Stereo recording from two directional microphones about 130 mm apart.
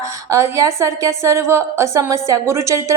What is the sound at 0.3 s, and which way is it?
A woman's voice, 20° right (ahead or behind).